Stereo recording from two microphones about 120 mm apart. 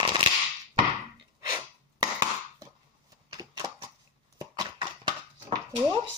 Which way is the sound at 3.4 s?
35° right (ahead or behind).